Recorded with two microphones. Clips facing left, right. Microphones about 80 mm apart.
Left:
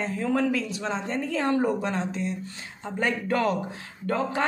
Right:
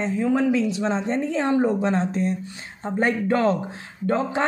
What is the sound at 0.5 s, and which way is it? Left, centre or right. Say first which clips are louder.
A woman's voice: right 6 dB; right.